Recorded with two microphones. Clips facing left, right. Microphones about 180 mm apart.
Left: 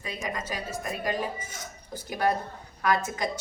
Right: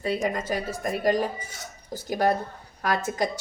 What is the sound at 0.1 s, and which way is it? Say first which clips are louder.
A woman's voice: right 7 dB; 55° right (ahead or behind).